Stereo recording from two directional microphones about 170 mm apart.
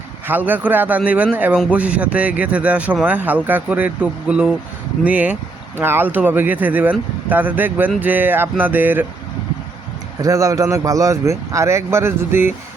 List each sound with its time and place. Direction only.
0.3 s a man's voice: 10° right (ahead or behind)
10.2 s a man's voice: 20° right (ahead or behind)